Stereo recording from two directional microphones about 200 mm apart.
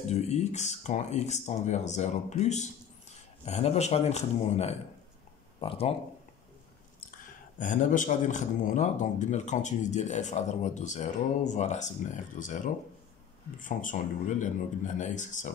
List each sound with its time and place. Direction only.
0.1 s a man's voice: 35° left (ahead or behind)
7.1 s a man's voice: 40° left (ahead or behind)